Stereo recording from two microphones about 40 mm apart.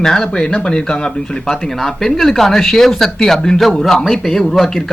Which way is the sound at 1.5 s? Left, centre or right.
Centre.